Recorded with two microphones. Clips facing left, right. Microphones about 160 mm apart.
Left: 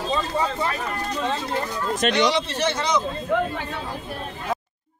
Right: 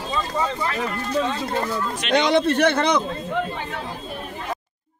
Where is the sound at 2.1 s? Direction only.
55° right (ahead or behind).